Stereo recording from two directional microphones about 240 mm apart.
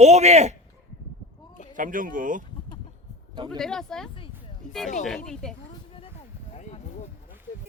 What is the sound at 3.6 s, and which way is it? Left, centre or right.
Speech, centre.